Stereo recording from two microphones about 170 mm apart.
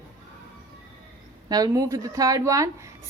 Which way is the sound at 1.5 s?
20° right (ahead or behind).